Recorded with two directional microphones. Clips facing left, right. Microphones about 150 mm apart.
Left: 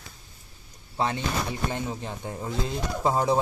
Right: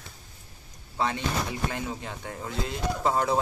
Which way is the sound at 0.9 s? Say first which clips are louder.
Left 1 dB; 30° left (ahead or behind).